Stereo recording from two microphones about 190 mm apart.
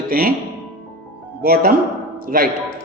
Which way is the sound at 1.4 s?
50° right (ahead or behind).